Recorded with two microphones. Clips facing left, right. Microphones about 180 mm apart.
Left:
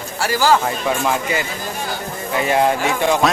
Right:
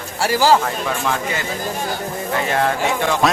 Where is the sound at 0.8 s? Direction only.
15° left (ahead or behind).